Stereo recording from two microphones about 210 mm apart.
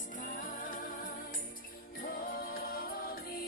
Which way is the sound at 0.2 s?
40° left (ahead or behind).